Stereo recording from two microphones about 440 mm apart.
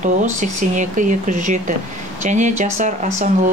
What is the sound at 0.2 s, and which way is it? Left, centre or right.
Speech, centre.